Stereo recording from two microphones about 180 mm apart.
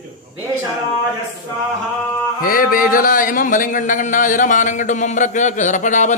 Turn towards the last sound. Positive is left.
turn(degrees=45)  # may be behind; listen again after turning